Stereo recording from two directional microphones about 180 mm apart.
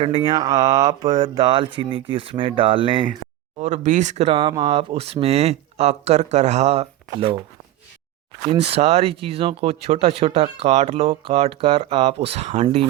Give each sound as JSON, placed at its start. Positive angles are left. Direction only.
{"t": 0.0, "sound": "speech", "side_deg": -30}
{"t": 3.6, "sound": "speech", "side_deg": -40}
{"t": 8.4, "sound": "speech", "side_deg": -30}